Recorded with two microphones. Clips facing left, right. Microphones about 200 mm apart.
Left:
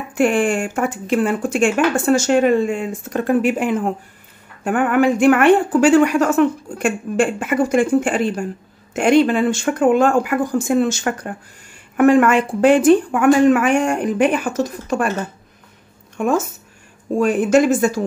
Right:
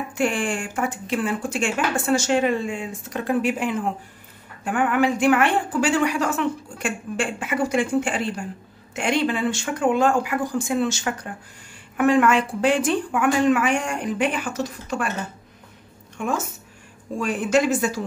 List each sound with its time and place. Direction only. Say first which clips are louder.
0.1 s a woman's voice: left 8 dB; 50° left (ahead or behind)
17.2 s a woman's voice: left 6 dB; 50° left (ahead or behind)